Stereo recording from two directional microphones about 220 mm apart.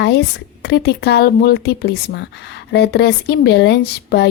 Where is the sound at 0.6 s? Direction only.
50° left (ahead or behind).